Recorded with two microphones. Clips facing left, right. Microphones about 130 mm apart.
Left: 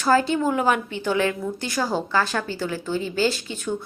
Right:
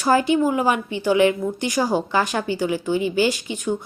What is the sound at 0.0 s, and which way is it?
A woman's voice, 15° right (ahead or behind).